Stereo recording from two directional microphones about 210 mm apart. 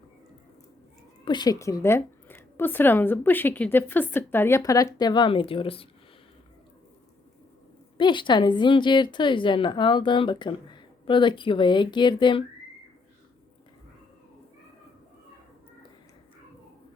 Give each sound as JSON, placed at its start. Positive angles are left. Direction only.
{"t": 1.2, "sound": "speech", "side_deg": 20}
{"t": 7.9, "sound": "a woman's voice", "side_deg": 20}